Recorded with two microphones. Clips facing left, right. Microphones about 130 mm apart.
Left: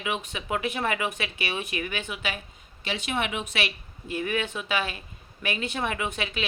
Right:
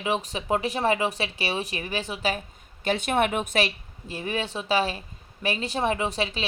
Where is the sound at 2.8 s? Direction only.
50° right (ahead or behind).